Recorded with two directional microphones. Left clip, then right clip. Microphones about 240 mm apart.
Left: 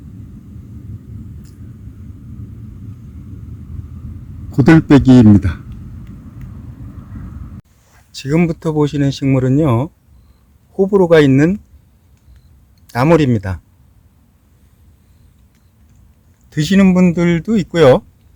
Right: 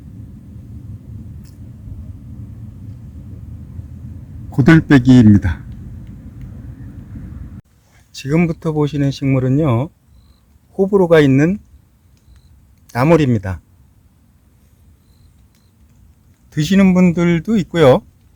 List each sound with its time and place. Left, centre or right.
4.5 s speech: centre
8.1 s speech: centre
12.9 s speech: centre
16.5 s speech: centre